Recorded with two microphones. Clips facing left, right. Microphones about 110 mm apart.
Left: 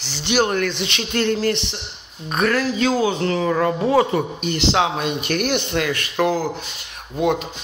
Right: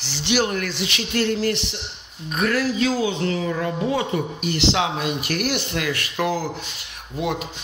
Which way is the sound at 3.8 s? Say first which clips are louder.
Left 6 dB; 40° left (ahead or behind).